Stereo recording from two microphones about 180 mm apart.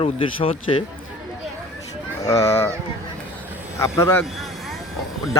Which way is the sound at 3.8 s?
15° left (ahead or behind).